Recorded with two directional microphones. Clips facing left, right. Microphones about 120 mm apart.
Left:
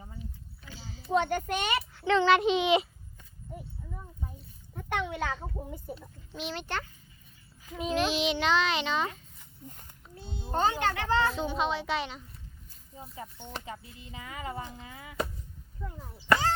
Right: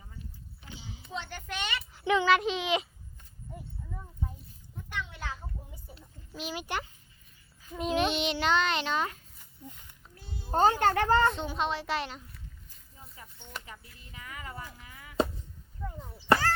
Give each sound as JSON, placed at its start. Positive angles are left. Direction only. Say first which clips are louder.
{"t": 0.6, "sound": "a sound", "louder": "even", "side_deg": -20}
{"t": 1.1, "sound": "a child's voice", "louder": "left 11 dB", "side_deg": 50}
{"t": 2.0, "sound": "a child's voice", "louder": "left 1 dB", "side_deg": -10}
{"t": 2.3, "sound": "a child's voice", "louder": "left 3 dB", "side_deg": 0}
{"t": 3.5, "sound": "a sound", "louder": "left 1 dB", "side_deg": 5}
{"t": 4.7, "sound": "a sound", "louder": "left 7 dB", "side_deg": 65}
{"t": 5.6, "sound": "a child's voice", "louder": "left 11 dB", "side_deg": 50}
{"t": 6.3, "sound": "speech", "louder": "even", "side_deg": -5}
{"t": 7.8, "sound": "a child's voice", "louder": "even", "side_deg": 0}
{"t": 9.6, "sound": "a child's voice", "louder": "even", "side_deg": 40}
{"t": 10.2, "sound": "a sound", "louder": "left 4 dB", "side_deg": 25}
{"t": 10.5, "sound": "speech", "louder": "right 4 dB", "side_deg": -40}
{"t": 11.3, "sound": "a child's voice", "louder": "left 2 dB", "side_deg": 0}
{"t": 13.0, "sound": "speech", "louder": "left 9 dB", "side_deg": 25}